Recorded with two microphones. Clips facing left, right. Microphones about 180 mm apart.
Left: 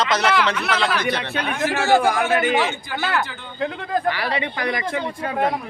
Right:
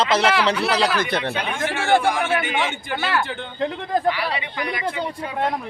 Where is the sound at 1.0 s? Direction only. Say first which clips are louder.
Right 1 dB; 55° right (ahead or behind).